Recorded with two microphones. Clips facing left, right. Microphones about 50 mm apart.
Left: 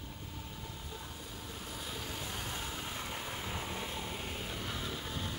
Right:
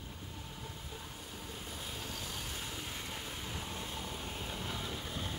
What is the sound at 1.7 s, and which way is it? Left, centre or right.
Vehicle, centre.